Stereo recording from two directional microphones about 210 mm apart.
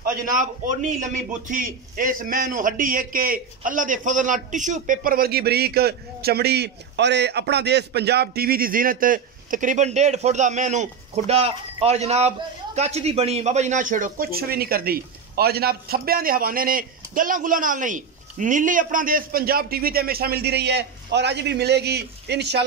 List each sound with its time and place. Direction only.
0.0 s a man's voice: 40° right (ahead or behind)